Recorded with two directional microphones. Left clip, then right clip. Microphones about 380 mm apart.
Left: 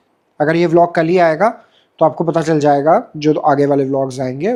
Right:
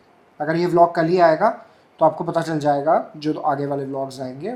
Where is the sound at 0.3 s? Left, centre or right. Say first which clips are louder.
Left 5 dB; left.